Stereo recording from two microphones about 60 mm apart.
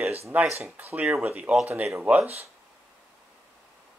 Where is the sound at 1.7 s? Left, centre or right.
Right.